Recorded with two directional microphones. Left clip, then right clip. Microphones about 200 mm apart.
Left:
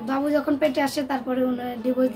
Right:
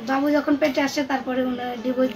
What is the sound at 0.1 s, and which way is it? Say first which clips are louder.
A woman's voice: right 2 dB; 30° left (ahead or behind).